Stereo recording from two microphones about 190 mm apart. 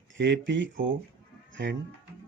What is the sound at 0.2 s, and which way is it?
Speech, 65° right (ahead or behind).